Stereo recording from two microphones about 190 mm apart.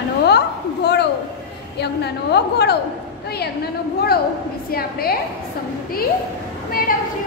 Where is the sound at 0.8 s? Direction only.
60° left (ahead or behind).